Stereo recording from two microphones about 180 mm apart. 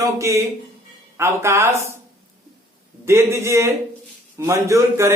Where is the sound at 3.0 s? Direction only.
15° right (ahead or behind).